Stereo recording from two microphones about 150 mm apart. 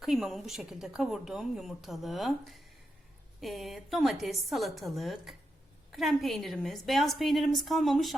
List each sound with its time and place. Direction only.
0.0 s speech: centre (ahead or behind)